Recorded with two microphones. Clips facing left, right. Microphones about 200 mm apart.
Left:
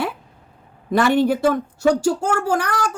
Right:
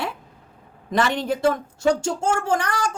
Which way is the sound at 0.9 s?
5° left (ahead or behind).